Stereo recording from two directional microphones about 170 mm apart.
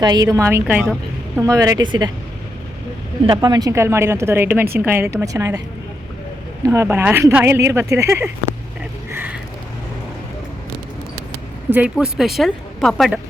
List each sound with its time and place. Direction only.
0.0 s speech: 25° right (ahead or behind); by 0.9 s 5° right (ahead or behind)
1.4 s speech: 20° right (ahead or behind)
3.2 s speech: 25° right (ahead or behind)
6.7 s speech: 15° right (ahead or behind)
9.1 s a sound: 10° right (ahead or behind)
11.7 s a woman's voice: 5° right (ahead or behind)